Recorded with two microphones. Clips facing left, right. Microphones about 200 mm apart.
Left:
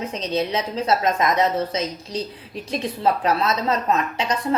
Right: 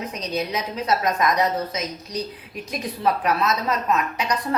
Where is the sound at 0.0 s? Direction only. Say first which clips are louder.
Left 3 dB; 25° left (ahead or behind).